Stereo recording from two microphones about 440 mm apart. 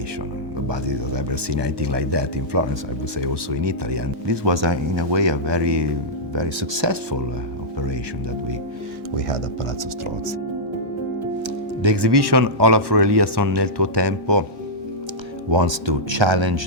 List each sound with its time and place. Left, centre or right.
0.7 s speech: right
6.3 s speech: right
11.4 s speech: right
15.4 s speech: right